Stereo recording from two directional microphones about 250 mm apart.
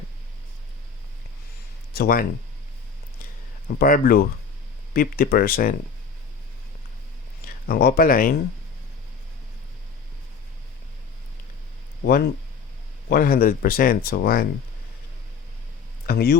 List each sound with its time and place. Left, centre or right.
1.9 s speech: left
3.8 s speech: left
7.4 s speech: left
12.0 s speech: left
16.0 s speech: left